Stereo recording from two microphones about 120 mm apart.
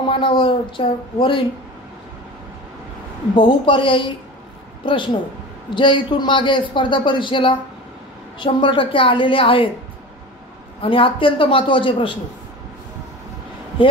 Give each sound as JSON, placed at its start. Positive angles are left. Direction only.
{"t": 0.0, "sound": "a man's voice", "side_deg": 45}
{"t": 3.3, "sound": "a man's voice", "side_deg": 45}
{"t": 10.8, "sound": "a man's voice", "side_deg": 45}